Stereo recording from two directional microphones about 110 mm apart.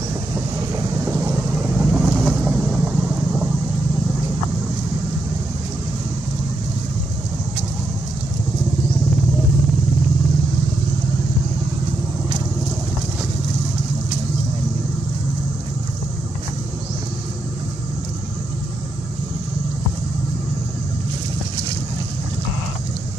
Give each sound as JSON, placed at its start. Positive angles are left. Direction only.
{"t": 1.1, "sound": "vehicle", "side_deg": -20}